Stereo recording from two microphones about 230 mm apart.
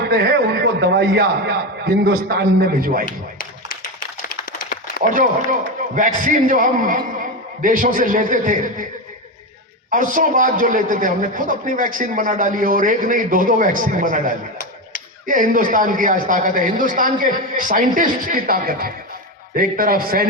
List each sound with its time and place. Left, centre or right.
0.0 s a man's voice: right
3.1 s a sound: left
4.4 s run: left
5.1 s a man's voice: right
9.9 s a man's voice: right